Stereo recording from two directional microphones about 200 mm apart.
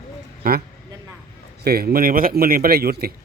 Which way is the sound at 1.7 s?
50° right (ahead or behind).